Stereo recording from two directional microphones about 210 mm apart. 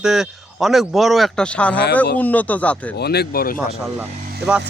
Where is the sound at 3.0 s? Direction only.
50° left (ahead or behind).